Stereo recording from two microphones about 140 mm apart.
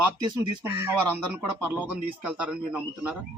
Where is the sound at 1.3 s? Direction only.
10° right (ahead or behind).